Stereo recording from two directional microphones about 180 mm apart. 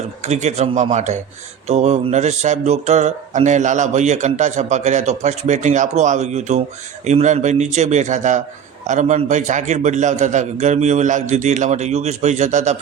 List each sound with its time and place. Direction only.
0.2 s speech: 40° right (ahead or behind)